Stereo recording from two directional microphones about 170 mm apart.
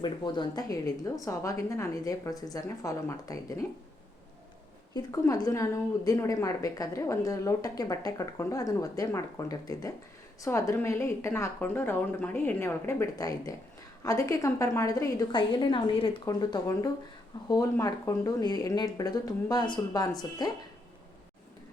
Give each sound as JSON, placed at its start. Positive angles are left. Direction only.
{"t": 0.0, "sound": "a woman's voice", "side_deg": 25}
{"t": 4.9, "sound": "a woman's voice", "side_deg": 20}